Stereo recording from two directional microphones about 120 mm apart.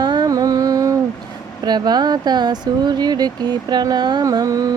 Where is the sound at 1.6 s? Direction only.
35° right (ahead or behind).